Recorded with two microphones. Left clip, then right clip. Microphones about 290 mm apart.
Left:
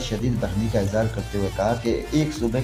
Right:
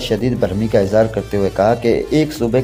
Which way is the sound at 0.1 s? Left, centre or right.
Right.